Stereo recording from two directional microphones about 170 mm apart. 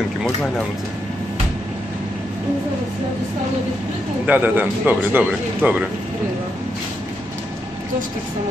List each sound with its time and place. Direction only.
4.3 s speech: 10° right (ahead or behind)